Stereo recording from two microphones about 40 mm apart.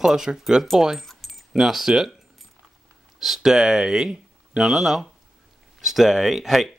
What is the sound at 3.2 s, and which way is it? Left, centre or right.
Speech, centre.